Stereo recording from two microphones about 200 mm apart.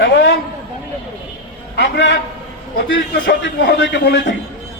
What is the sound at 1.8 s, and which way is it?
Speech, 60° left (ahead or behind).